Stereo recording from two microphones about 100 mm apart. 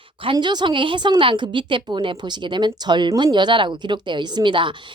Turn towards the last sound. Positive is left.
turn(degrees=-55)  # may be behind; listen again after turning